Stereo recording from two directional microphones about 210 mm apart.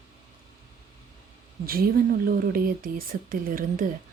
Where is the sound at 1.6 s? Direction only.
45° right (ahead or behind).